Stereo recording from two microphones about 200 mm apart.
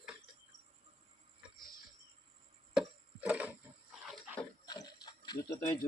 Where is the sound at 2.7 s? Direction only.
5° right (ahead or behind).